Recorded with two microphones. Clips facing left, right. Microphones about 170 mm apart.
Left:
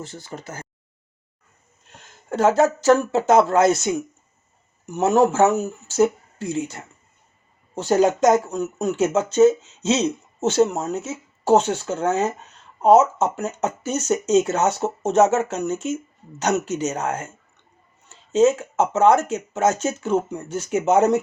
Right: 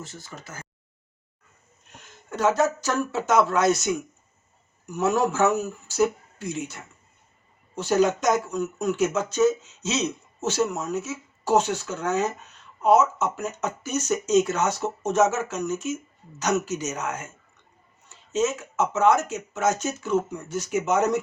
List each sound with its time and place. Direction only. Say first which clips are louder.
0.1 s speech: left 6 dB; 35° left (ahead or behind)
2.3 s speech: left 5 dB; 30° left (ahead or behind)
18.3 s speech: left 8 dB; 30° left (ahead or behind)